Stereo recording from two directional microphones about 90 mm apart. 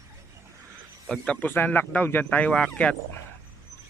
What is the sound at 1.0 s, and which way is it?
Speech, 5° left (ahead or behind).